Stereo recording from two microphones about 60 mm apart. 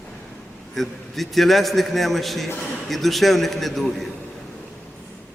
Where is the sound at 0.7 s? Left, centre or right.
Centre.